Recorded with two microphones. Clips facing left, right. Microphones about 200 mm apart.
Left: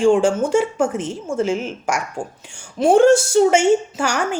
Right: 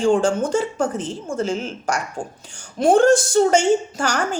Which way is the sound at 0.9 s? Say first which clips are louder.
Left 2 dB; 35° right (ahead or behind).